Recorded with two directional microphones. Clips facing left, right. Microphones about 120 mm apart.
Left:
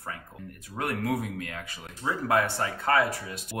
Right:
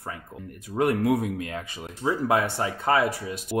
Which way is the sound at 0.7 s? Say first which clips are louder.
Right 7 dB; 20° right (ahead or behind).